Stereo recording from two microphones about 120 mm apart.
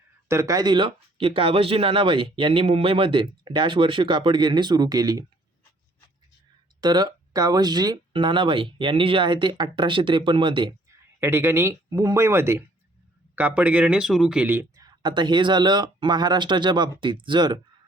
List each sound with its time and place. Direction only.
0.3 s speech: 25° right (ahead or behind)
0.9 s speech: 50° right (ahead or behind); by 5.2 s 35° right (ahead or behind)
6.8 s speech: 35° right (ahead or behind)
10.7 s speech: 25° right (ahead or behind); by 14.4 s 5° right (ahead or behind)
14.4 s speech: 15° right (ahead or behind)
14.8 s speech: 35° right (ahead or behind)